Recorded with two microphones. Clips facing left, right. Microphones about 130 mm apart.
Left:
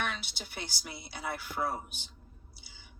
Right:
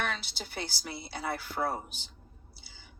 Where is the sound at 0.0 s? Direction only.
35° right (ahead or behind).